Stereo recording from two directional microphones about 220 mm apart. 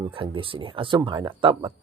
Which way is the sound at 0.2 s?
25° right (ahead or behind).